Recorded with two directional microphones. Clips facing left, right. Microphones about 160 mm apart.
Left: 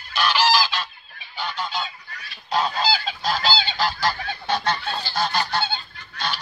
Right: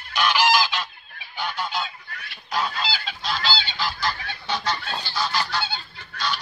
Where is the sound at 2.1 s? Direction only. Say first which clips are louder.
Right 1 dB; 65° right (ahead or behind).